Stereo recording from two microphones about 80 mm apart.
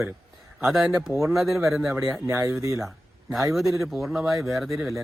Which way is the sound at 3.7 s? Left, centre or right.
Centre.